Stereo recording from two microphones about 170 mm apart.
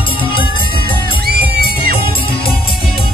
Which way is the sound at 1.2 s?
60° right (ahead or behind).